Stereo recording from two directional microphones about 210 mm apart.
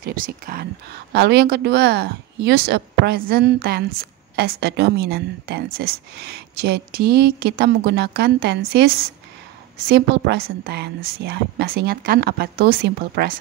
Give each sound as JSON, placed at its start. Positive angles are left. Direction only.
{"t": 0.0, "sound": "a woman's voice", "side_deg": -45}